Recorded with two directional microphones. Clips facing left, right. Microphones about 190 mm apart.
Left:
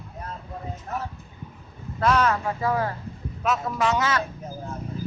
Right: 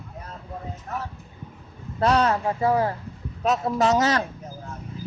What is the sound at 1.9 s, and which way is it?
A man's voice, 30° right (ahead or behind).